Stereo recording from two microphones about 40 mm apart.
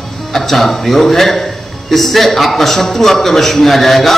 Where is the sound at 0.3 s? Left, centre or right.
Centre.